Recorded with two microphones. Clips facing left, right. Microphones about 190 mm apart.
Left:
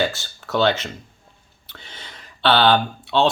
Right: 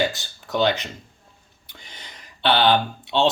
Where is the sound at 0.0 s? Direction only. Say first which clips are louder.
Left 1 dB; 15° right (ahead or behind).